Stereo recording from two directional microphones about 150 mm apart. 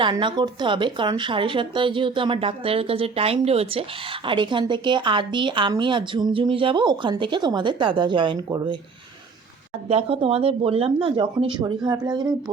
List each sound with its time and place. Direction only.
0.0 s speech: 35° right (ahead or behind)
9.9 s speech: 40° right (ahead or behind)